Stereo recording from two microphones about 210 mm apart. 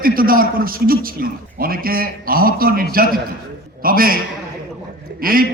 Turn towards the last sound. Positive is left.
turn(degrees=-45)  # may be behind; listen again after turning